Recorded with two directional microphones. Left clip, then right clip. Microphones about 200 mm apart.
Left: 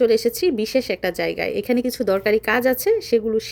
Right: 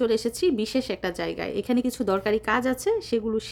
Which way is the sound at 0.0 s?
5° left (ahead or behind).